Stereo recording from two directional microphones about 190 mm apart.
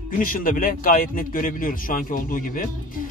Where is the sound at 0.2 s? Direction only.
45° left (ahead or behind).